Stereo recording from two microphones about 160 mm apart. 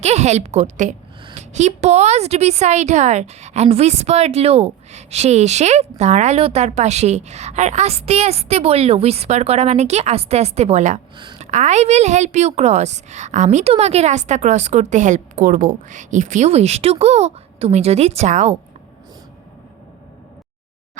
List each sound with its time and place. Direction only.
0.0 s a woman's voice: 45° right (ahead or behind)